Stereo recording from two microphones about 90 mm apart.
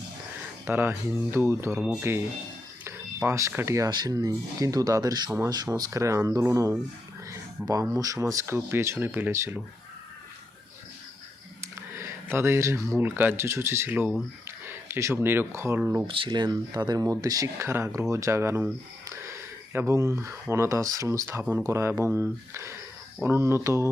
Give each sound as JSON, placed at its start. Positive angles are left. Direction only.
{"t": 0.7, "sound": "speech", "side_deg": -25}
{"t": 3.2, "sound": "speech", "side_deg": -35}
{"t": 3.5, "sound": "speech", "side_deg": -25}
{"t": 3.8, "sound": "speech", "side_deg": -50}
{"t": 7.3, "sound": "a sound", "side_deg": -35}
{"t": 7.9, "sound": "speech", "side_deg": -40}
{"t": 11.6, "sound": "a sound", "side_deg": -30}
{"t": 13.0, "sound": "speech", "side_deg": -20}
{"t": 16.0, "sound": "speech", "side_deg": -75}